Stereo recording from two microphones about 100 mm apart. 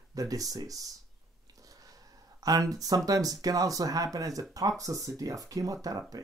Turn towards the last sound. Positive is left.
turn(degrees=-35)  # may be behind; listen again after turning